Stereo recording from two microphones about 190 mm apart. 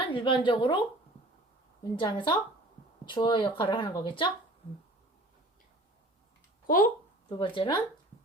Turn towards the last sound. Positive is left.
turn(degrees=25)  # may be behind; listen again after turning